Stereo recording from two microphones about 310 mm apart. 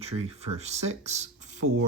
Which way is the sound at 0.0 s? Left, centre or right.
Centre.